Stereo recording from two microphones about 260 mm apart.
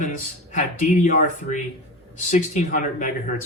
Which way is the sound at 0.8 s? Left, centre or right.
Left.